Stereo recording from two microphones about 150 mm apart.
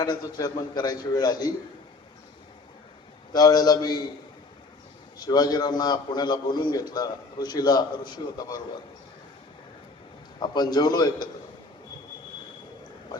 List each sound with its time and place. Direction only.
0.0 s a man's voice: 25° left (ahead or behind)
3.3 s a man's voice: 25° left (ahead or behind)
5.1 s a man's voice: 25° left (ahead or behind)
10.4 s a man's voice: 30° left (ahead or behind)